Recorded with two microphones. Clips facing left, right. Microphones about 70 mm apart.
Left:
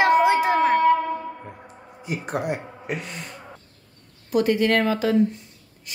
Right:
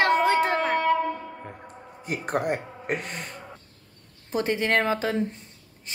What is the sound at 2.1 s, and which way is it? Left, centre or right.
Speech, right.